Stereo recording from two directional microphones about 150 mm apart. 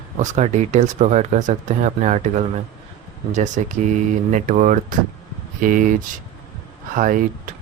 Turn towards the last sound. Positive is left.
turn(degrees=-65)  # may be behind; listen again after turning